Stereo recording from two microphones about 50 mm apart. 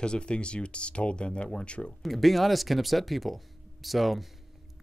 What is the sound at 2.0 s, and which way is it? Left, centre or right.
Speech, centre.